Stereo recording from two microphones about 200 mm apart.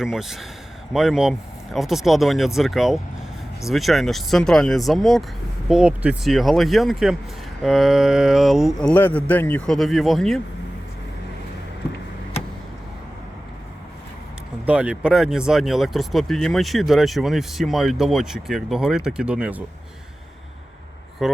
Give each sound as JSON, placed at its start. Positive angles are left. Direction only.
{"t": 0.0, "sound": "speech", "side_deg": 0}
{"t": 14.7, "sound": "speech", "side_deg": -5}
{"t": 21.2, "sound": "speech", "side_deg": 0}